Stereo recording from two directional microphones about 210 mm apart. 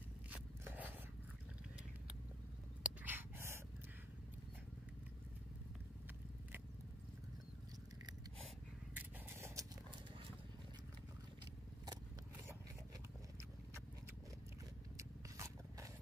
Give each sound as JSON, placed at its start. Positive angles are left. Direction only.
{"t": 0.7, "sound": "scrape", "side_deg": -10}
{"t": 2.8, "sound": "a sound", "side_deg": -10}
{"t": 8.9, "sound": "scrape", "side_deg": -15}
{"t": 15.0, "sound": "scrape", "side_deg": -15}